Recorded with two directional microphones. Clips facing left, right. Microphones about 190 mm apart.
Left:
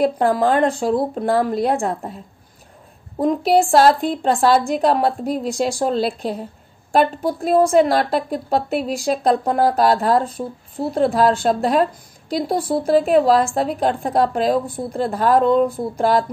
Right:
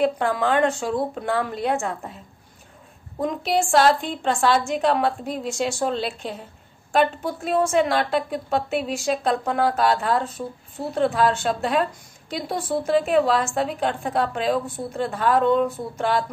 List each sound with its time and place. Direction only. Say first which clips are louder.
0.0 s a woman's voice: left 5 dB; 35° left (ahead or behind)
3.2 s a woman's voice: left 7 dB; 35° left (ahead or behind)